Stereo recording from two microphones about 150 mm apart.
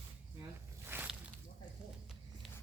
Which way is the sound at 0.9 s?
10° right (ahead or behind).